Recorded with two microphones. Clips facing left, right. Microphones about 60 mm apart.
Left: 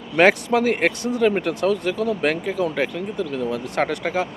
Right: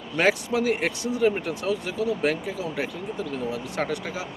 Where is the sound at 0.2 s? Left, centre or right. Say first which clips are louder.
Left 6 dB; left.